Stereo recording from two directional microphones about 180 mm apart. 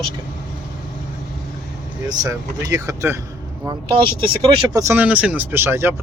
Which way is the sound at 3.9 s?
25° right (ahead or behind).